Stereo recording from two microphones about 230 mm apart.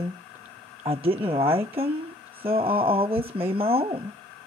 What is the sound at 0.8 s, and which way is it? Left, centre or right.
Speech, right.